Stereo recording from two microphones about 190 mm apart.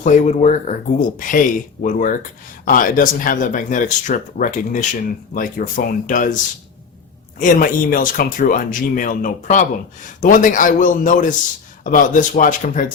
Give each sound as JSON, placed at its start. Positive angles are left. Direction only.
{"t": 0.0, "sound": "speech", "side_deg": 40}